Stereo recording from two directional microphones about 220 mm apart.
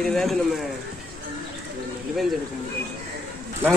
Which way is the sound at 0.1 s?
Centre (ahead or behind).